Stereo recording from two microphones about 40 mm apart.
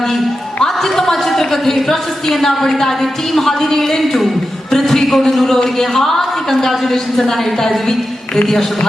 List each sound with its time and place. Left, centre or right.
0.6 s a woman's voice: centre
4.7 s a sound: centre
5.6 s a woman's voice: centre